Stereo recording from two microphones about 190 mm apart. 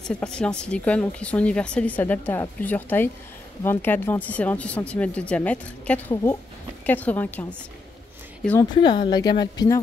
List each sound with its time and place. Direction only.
0.0 s speech: 5° left (ahead or behind)
8.7 s speech: 25° left (ahead or behind)